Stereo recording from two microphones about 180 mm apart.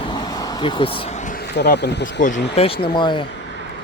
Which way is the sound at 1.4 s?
70° left (ahead or behind).